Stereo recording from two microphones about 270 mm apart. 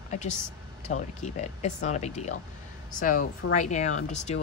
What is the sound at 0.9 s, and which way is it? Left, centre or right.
Speech, left.